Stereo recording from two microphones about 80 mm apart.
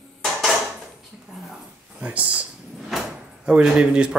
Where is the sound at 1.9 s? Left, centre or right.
Centre.